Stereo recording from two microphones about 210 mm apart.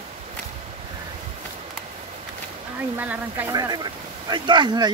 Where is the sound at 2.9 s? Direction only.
10° right (ahead or behind).